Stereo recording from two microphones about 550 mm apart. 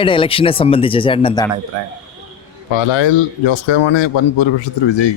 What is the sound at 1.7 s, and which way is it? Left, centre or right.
Speech, right.